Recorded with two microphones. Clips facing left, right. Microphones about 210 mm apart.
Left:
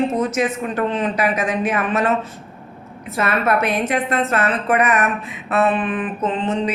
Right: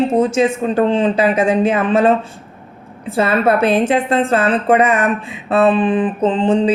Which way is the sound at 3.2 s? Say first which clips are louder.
Right 5 dB; 30° right (ahead or behind).